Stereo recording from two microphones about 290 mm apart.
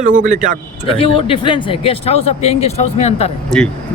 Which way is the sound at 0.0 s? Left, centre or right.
Right.